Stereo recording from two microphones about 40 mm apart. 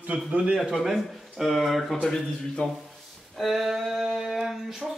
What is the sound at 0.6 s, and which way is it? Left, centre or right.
A man's voice, centre.